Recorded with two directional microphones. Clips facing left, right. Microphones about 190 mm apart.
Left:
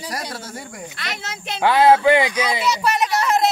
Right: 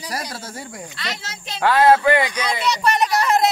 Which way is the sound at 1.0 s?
55° left (ahead or behind).